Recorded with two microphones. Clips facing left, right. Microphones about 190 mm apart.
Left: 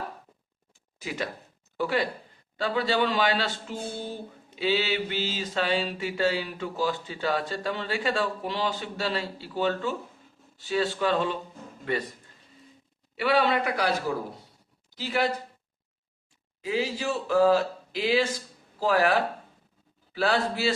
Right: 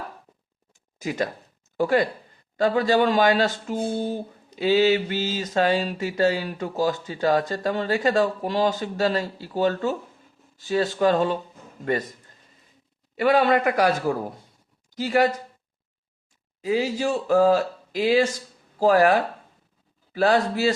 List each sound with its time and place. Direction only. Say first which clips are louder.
0.9 s speech: right 6 dB; 45° right (ahead or behind)
13.1 s speech: right 5 dB; 50° right (ahead or behind)
16.6 s speech: right 5 dB; 40° right (ahead or behind)
20.1 s speech: right 5 dB; 40° right (ahead or behind)